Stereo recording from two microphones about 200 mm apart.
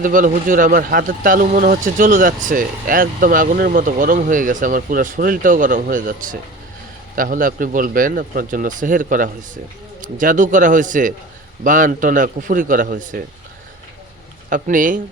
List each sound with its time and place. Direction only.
0.0 s a man's voice: 45° right (ahead or behind)
14.5 s speech: 45° right (ahead or behind)